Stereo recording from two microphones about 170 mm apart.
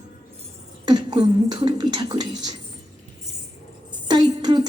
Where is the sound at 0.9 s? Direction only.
25° right (ahead or behind).